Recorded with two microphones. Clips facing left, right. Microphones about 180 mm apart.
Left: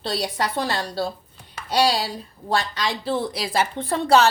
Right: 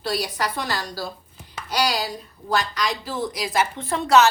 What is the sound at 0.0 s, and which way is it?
A woman's voice, 25° left (ahead or behind).